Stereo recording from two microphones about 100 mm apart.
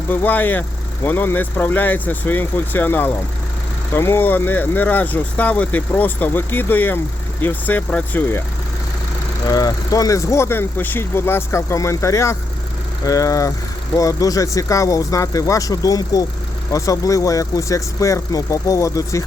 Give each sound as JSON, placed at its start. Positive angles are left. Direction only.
{"t": 0.1, "sound": "speech", "side_deg": 20}
{"t": 9.5, "sound": "speech", "side_deg": 40}